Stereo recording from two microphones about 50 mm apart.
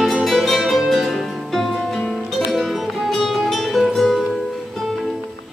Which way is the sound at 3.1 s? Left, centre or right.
Centre.